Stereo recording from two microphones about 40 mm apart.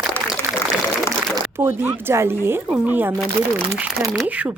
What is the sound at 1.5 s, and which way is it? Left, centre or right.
Speech, right.